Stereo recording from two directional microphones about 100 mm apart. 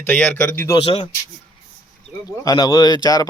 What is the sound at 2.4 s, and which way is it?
Speech, 35° left (ahead or behind).